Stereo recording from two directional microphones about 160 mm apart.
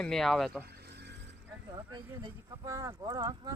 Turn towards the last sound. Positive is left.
turn(degrees=-25)  # may be behind; listen again after turning